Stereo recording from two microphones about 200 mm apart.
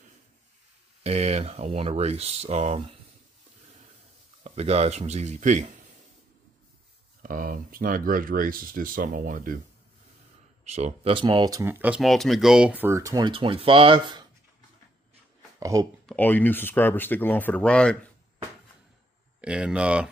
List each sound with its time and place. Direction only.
1.0 s speech: 30° right (ahead or behind)
4.4 s speech: 35° right (ahead or behind)
7.2 s speech: 45° right (ahead or behind)
10.6 s speech: 35° right (ahead or behind)
15.6 s speech: 15° right (ahead or behind)
16.1 s speech: 10° left (ahead or behind)
19.4 s speech: 5° right (ahead or behind)